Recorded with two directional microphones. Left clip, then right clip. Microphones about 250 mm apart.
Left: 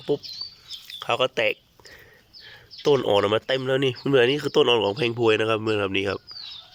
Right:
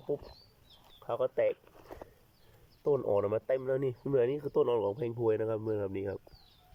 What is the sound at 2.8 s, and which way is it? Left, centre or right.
Speech, left.